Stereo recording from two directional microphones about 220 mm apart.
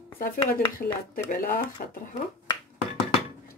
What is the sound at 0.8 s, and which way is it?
Speech, 40° left (ahead or behind).